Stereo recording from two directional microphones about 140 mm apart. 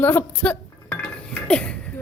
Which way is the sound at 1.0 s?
10° left (ahead or behind).